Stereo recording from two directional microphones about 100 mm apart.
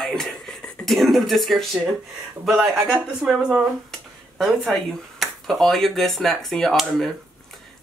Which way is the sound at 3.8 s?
Centre (ahead or behind).